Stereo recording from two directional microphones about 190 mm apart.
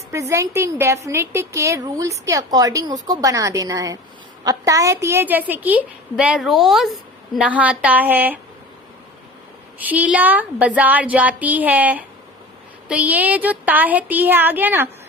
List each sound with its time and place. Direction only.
0.1 s a woman's voice: 15° right (ahead or behind)
9.7 s a woman's voice: 10° right (ahead or behind)